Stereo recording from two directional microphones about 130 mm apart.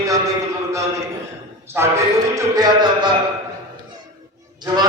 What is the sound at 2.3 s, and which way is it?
Music, 30° right (ahead or behind).